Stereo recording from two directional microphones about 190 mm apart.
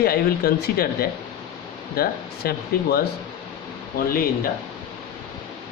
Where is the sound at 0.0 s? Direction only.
55° left (ahead or behind).